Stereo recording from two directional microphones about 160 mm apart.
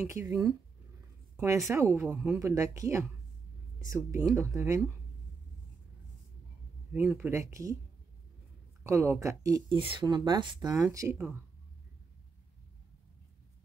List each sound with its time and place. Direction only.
0.0 s speech: 15° right (ahead or behind)
1.4 s speech: 20° right (ahead or behind)
6.9 s speech: 10° right (ahead or behind)
8.8 s speech: 15° right (ahead or behind)
9.8 s speech: 30° right (ahead or behind)